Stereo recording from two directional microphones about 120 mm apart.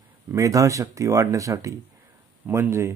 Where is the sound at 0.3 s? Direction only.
25° right (ahead or behind).